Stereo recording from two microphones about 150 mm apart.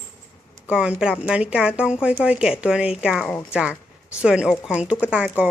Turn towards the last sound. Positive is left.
turn(degrees=-5)  # may be behind; listen again after turning